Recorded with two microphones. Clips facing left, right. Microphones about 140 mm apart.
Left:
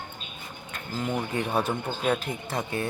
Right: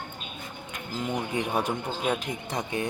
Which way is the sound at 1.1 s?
15° right (ahead or behind).